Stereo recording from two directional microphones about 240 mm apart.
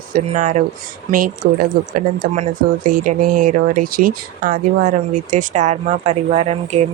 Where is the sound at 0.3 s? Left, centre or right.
Right.